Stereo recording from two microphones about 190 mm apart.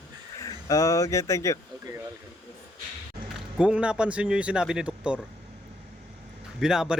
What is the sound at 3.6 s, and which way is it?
Speech, 5° right (ahead or behind).